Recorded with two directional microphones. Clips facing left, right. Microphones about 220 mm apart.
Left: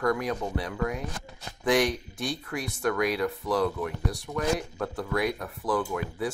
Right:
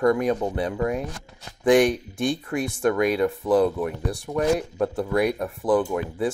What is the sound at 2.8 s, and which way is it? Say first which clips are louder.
Speech: right 5 dB; 25° right (ahead or behind).